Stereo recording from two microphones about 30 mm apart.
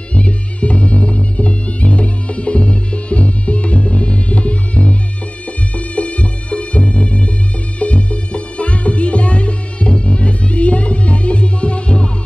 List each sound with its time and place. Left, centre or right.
0.1 s music: left